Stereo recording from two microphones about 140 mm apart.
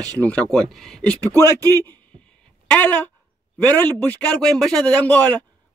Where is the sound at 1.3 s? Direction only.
20° left (ahead or behind).